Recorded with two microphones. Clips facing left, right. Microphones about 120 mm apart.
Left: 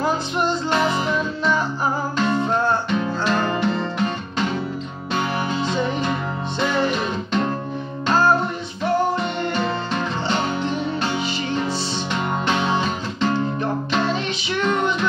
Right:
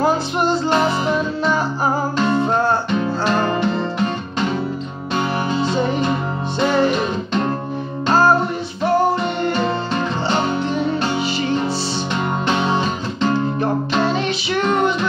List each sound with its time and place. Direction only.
0.0 s music: 5° right (ahead or behind)
0.7 s music: 30° right (ahead or behind)
2.2 s music: 5° right (ahead or behind)
2.6 s music: 35° right (ahead or behind)
6.6 s music: 30° right (ahead or behind)
8.8 s music: 10° right (ahead or behind)
12.4 s music: 25° right (ahead or behind)
13.3 s music: 5° right (ahead or behind)